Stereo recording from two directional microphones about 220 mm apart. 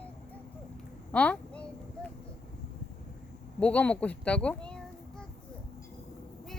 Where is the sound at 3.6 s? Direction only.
5° left (ahead or behind).